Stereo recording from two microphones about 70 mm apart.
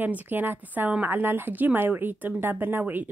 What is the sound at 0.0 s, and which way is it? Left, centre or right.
A woman's voice, right.